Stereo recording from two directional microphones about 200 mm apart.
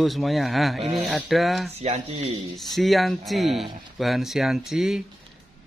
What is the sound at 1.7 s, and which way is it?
Speech, 30° right (ahead or behind).